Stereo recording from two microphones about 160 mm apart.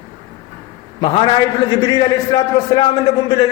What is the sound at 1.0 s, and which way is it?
A man's voice, 30° left (ahead or behind).